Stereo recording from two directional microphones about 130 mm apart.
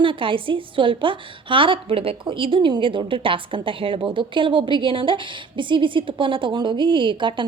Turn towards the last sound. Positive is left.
turn(degrees=-40)  # may be behind; listen again after turning